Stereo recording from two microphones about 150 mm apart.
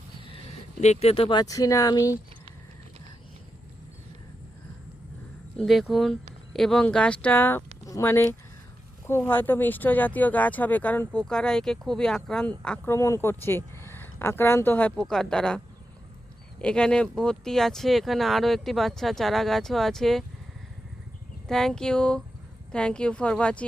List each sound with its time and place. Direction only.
0.3 s speech: 40° left (ahead or behind); by 2.1 s 25° left (ahead or behind)
5.5 s speech: centre (ahead or behind)
12.9 s speech: 20° left (ahead or behind); by 20.2 s centre (ahead or behind)
21.4 s speech: 5° left (ahead or behind)